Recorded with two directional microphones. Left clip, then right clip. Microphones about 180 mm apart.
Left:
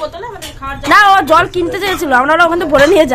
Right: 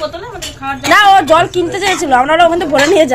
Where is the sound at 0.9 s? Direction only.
15° left (ahead or behind).